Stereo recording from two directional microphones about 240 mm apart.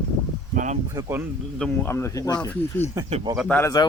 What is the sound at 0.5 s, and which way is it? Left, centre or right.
Speech, right.